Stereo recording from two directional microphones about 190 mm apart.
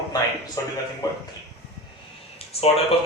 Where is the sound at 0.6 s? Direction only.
15° left (ahead or behind).